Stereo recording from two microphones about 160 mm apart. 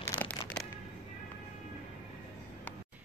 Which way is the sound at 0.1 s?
25° left (ahead or behind).